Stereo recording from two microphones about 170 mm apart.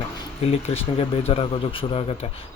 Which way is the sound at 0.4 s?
35° left (ahead or behind).